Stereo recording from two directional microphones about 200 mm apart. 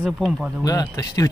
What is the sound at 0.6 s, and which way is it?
Speech, 20° left (ahead or behind).